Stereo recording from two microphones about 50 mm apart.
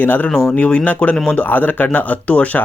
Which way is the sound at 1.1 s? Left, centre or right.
Centre.